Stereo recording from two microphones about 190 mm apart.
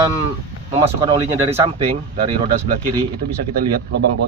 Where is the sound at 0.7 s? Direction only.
25° right (ahead or behind).